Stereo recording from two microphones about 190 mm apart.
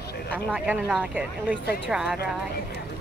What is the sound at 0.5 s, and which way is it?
Speech, 5° right (ahead or behind).